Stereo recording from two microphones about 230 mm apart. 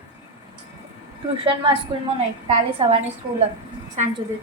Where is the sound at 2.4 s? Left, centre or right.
Right.